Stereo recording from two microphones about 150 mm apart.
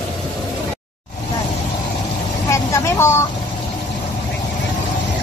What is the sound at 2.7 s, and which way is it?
Speech, 15° left (ahead or behind).